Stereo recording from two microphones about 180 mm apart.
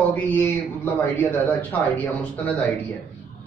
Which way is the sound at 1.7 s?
10° left (ahead or behind).